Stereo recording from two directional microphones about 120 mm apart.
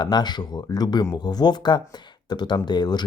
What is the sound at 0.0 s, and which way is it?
Speech, 35° left (ahead or behind).